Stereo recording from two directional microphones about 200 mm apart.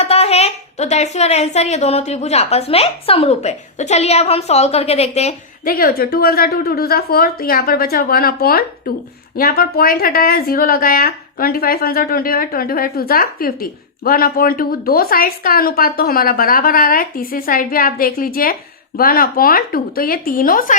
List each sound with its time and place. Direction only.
0.0 s speech: 30° left (ahead or behind)
5.6 s a woman's voice: 45° left (ahead or behind)